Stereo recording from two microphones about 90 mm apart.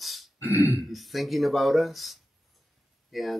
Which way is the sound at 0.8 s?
Centre (ahead or behind).